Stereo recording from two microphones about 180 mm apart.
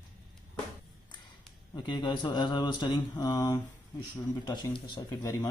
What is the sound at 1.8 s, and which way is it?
Speech, 25° left (ahead or behind).